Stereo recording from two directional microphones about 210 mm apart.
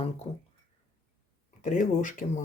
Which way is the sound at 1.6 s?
35° left (ahead or behind).